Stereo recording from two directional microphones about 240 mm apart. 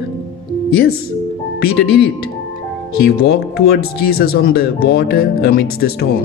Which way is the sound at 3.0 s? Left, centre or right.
Left.